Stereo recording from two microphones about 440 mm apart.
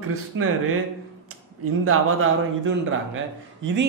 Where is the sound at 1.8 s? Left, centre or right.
Right.